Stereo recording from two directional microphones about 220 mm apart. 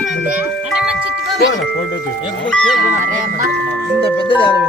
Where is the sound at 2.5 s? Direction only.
5° left (ahead or behind).